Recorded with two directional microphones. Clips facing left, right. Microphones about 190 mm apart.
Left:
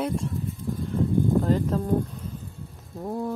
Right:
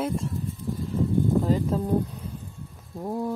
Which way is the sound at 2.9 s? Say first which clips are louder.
Right 1 dB; 5° right (ahead or behind).